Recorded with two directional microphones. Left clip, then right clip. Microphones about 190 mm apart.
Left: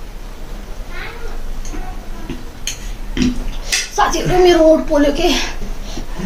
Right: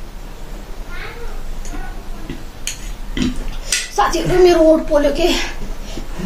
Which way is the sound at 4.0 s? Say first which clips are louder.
Even; 10° right (ahead or behind).